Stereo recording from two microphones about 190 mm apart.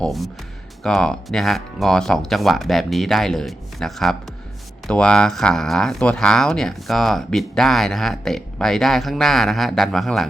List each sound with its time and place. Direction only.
0.0 s speech: centre (ahead or behind)